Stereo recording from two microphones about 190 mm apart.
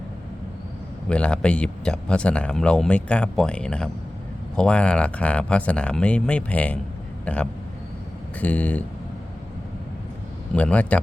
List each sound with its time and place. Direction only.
1.1 s a man's voice: 5° left (ahead or behind)
10.5 s a man's voice: 5° left (ahead or behind)